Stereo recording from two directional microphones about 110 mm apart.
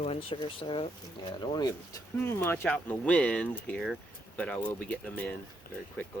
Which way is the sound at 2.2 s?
20° left (ahead or behind).